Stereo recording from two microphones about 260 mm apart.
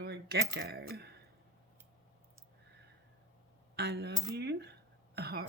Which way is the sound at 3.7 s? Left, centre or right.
Right.